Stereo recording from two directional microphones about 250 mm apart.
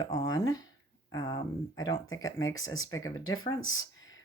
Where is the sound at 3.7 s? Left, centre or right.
Centre.